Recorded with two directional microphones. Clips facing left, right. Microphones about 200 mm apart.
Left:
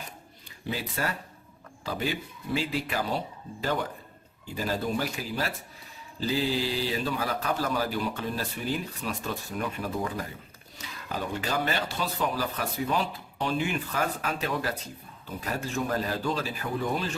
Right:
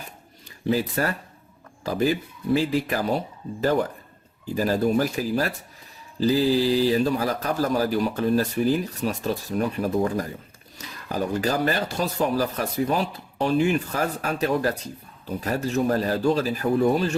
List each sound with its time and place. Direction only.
1.0 s speech: 45° right (ahead or behind)
4.5 s a man's voice: 45° right (ahead or behind)